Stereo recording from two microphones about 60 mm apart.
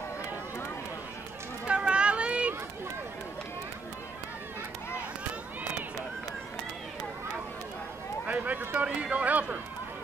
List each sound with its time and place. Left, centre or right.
1.7 s run: centre
5.6 s run: right
8.3 s run: right
8.8 s speech: right